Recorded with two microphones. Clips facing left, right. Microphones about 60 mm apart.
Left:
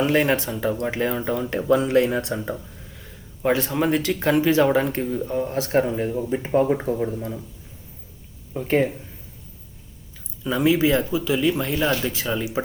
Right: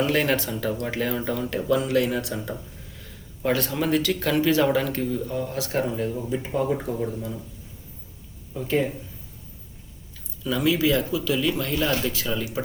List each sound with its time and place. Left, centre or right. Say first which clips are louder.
0.0 s speech: left 3 dB; left
6.7 s speech: left 3 dB; left
8.5 s speech: left 3 dB; left
10.4 s speech: left 3 dB; left